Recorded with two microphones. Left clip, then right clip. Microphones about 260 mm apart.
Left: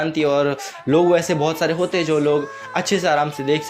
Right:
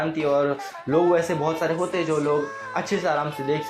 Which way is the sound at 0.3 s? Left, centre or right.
Left.